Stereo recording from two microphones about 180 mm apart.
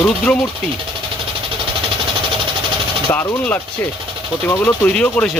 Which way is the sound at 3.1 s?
10° left (ahead or behind).